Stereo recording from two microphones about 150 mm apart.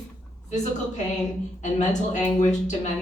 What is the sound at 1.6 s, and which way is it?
A woman's voice, 55° left (ahead or behind).